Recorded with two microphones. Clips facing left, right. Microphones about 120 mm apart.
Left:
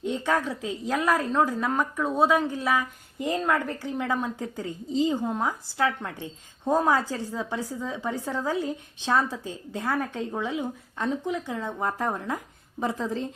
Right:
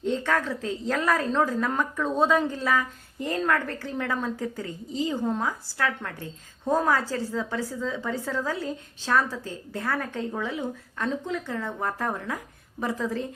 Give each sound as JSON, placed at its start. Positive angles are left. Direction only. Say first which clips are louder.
{"t": 0.0, "sound": "a woman's voice", "louder": "even", "side_deg": 15}